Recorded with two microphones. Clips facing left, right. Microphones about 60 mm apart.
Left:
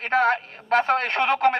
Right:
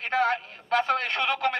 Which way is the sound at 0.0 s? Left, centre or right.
Left.